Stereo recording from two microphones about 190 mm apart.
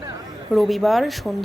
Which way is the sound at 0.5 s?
Centre (ahead or behind).